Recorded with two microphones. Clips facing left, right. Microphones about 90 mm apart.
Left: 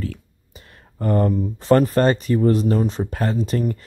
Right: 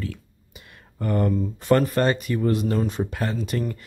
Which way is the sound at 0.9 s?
35° left (ahead or behind).